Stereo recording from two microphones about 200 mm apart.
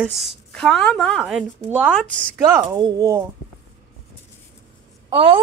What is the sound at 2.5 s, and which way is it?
Speech, 15° right (ahead or behind).